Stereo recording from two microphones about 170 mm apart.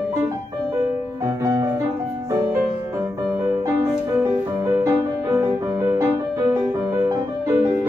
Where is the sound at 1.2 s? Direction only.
20° right (ahead or behind).